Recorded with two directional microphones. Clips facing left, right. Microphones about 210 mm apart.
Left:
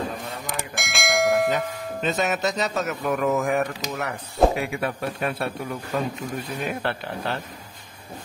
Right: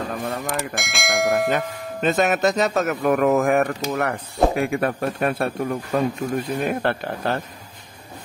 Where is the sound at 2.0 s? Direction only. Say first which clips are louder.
Right 5 dB; 55° right (ahead or behind).